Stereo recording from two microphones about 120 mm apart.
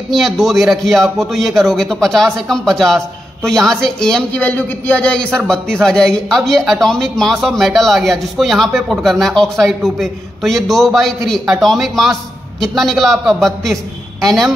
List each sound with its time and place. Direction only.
0.1 s a man's voice: centre (ahead or behind)